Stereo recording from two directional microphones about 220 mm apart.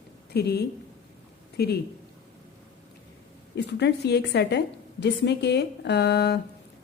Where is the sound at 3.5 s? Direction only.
50° left (ahead or behind).